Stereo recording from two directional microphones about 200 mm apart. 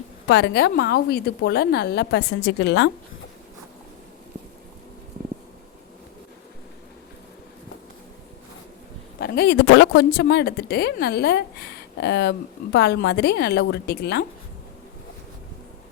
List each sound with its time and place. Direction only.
0.3 s speech: 55° left (ahead or behind)
9.2 s speech: 55° left (ahead or behind)